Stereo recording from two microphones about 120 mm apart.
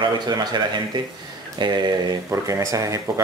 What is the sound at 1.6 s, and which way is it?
Speech, 40° right (ahead or behind).